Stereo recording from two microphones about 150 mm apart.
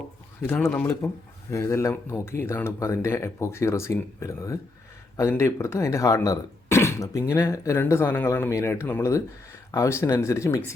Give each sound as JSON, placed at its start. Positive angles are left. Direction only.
{"t": 0.4, "sound": "speech", "side_deg": 15}